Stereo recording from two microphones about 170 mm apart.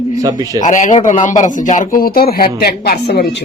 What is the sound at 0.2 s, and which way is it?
Speech, 20° right (ahead or behind).